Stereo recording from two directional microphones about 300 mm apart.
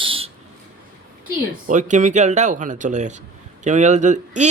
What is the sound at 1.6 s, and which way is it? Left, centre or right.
Speech, right.